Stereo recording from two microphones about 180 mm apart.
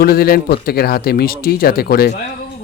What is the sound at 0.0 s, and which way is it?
A man's voice, 55° left (ahead or behind).